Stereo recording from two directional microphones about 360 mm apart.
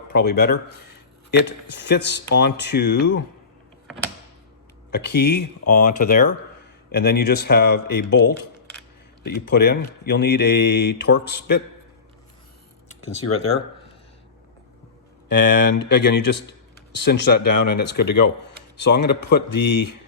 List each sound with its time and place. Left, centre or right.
0.1 s a man's voice: left
4.9 s speech: left
15.3 s speech: left